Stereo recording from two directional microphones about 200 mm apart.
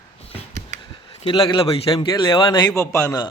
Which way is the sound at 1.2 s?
25° left (ahead or behind).